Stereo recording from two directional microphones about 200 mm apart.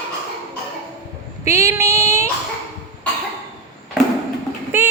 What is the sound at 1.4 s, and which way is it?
Female singing, 15° right (ahead or behind).